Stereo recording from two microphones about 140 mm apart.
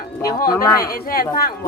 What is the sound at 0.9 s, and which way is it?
Speech, 90° left.